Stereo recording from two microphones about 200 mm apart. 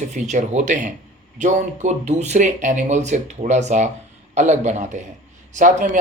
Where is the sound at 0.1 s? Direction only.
35° right (ahead or behind).